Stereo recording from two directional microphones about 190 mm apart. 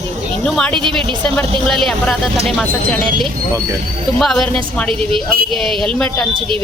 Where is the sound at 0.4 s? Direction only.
Centre (ahead or behind).